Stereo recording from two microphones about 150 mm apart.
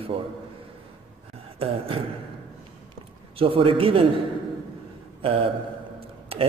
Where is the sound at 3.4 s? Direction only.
35° right (ahead or behind).